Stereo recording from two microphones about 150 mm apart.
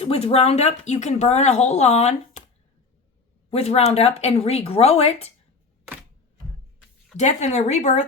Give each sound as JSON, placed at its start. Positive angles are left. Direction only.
{"t": 0.0, "sound": "a woman's voice", "side_deg": 40}
{"t": 3.5, "sound": "a woman's voice", "side_deg": 45}
{"t": 7.2, "sound": "a woman's voice", "side_deg": 50}